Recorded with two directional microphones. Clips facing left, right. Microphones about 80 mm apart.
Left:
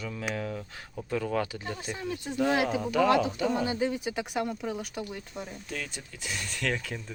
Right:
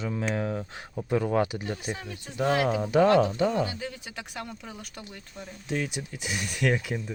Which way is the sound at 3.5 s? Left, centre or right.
Left.